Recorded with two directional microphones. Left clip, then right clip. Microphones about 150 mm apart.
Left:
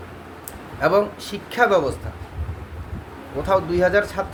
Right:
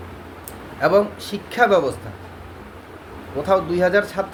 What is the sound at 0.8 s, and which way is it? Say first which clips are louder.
A man's voice: right 2 dB; 15° left (ahead or behind).